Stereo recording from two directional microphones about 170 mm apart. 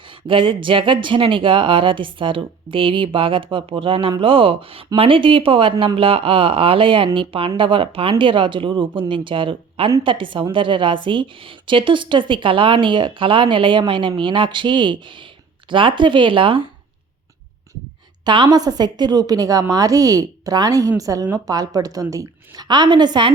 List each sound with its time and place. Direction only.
0.1 s a woman's voice: 30° right (ahead or behind)
18.3 s a woman's voice: 25° right (ahead or behind)